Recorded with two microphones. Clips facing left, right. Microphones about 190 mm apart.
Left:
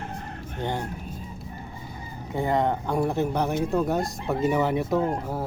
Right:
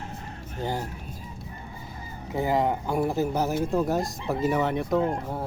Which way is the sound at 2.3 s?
5° right (ahead or behind).